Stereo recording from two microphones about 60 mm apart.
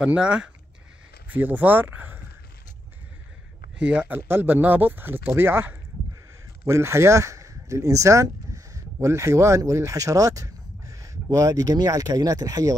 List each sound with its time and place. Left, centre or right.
0.0 s speech: centre
1.3 s speech: right
3.8 s speech: right
4.1 s speech: right
6.6 s speech: right